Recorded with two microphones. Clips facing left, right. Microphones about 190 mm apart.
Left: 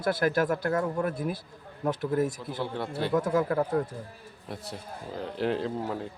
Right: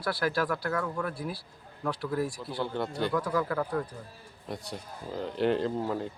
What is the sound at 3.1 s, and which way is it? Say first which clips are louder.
Speech: left 4 dB; 25° left (ahead or behind).